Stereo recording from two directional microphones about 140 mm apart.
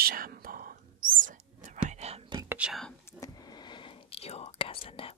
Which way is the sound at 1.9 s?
50° right (ahead or behind).